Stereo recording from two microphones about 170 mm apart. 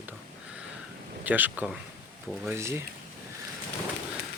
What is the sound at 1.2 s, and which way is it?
Speech, 10° right (ahead or behind).